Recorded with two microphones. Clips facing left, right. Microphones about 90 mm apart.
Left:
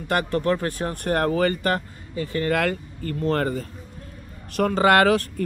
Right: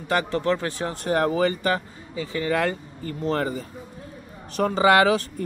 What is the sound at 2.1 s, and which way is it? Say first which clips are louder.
Speech: left 2 dB; 55° left (ahead or behind).